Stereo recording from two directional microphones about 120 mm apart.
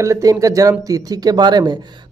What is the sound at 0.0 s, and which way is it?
Speech, 25° right (ahead or behind).